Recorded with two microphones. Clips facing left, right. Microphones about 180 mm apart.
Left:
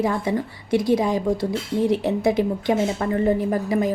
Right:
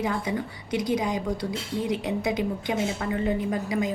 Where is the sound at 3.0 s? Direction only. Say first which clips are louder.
Left 6 dB; 40° left (ahead or behind).